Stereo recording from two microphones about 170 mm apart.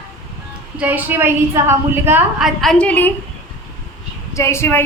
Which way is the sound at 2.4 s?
Centre (ahead or behind).